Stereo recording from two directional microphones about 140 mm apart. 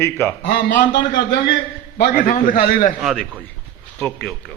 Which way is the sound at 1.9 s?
90° left.